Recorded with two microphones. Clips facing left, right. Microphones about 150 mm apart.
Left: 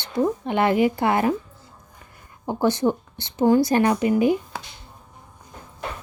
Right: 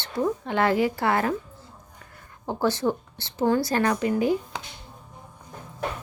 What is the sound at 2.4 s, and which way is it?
Speech, 15° left (ahead or behind).